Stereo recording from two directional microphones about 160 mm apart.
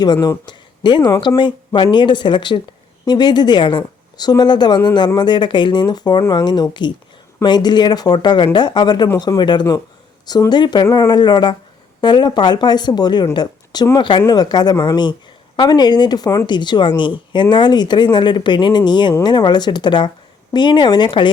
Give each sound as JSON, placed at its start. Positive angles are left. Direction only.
{"t": 0.0, "sound": "speech", "side_deg": 25}